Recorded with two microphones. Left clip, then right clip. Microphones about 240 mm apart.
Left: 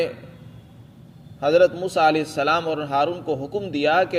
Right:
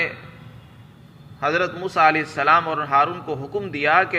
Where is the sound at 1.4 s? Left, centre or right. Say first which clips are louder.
Left 5 dB; left.